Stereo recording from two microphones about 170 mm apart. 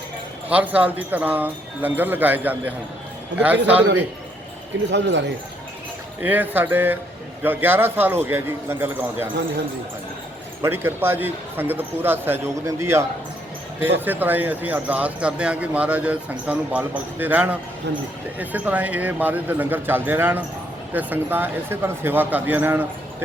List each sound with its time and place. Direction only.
0.5 s speech: 10° right (ahead or behind)
4.9 s speech: 90° right
6.2 s speech: 10° right (ahead or behind)
10.6 s speech: 15° right (ahead or behind)